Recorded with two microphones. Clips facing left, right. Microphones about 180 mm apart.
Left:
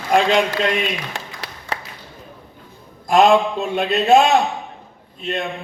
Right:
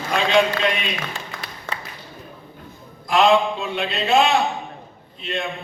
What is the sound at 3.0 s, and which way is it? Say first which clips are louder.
A man's voice: left 3 dB; 45° left (ahead or behind).